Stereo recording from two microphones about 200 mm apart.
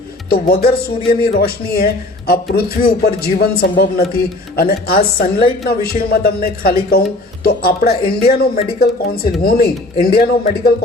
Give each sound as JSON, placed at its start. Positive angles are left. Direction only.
{"t": 0.3, "sound": "speech", "side_deg": 50}